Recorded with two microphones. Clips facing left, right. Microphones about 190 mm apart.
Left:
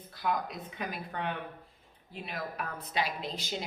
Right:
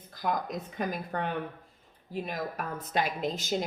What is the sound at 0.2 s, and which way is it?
A woman's voice, 45° right (ahead or behind).